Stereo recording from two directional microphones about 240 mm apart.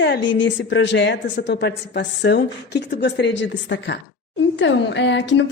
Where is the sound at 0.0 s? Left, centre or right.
Left.